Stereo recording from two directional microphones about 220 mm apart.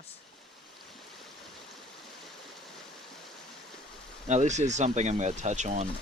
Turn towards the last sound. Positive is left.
turn(degrees=-30)  # may be behind; listen again after turning